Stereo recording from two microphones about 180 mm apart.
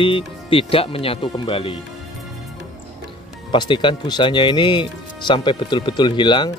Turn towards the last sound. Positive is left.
turn(degrees=25)  # may be behind; listen again after turning